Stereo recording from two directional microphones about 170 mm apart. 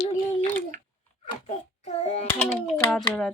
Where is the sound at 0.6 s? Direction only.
50° right (ahead or behind).